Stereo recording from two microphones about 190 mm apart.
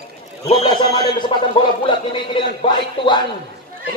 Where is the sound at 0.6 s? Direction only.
25° left (ahead or behind).